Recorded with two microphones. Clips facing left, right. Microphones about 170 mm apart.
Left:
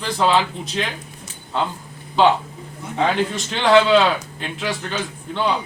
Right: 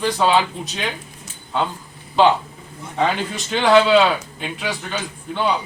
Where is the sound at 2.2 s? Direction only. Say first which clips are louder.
Right 1 dB; centre (ahead or behind).